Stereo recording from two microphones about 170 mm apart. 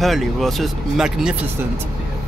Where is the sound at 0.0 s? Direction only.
Centre (ahead or behind).